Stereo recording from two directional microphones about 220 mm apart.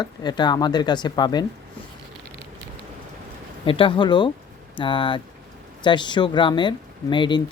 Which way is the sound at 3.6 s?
25° left (ahead or behind).